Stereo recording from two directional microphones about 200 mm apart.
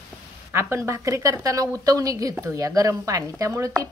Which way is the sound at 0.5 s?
15° right (ahead or behind).